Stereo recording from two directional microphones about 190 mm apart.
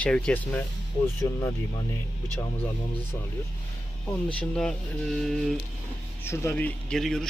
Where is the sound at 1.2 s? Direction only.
20° left (ahead or behind).